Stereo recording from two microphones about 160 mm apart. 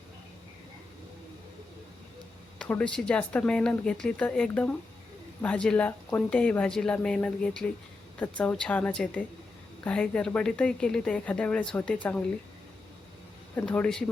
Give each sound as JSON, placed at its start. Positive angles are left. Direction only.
{"t": 2.6, "sound": "a woman's voice", "side_deg": 10}
{"t": 13.6, "sound": "speech", "side_deg": 10}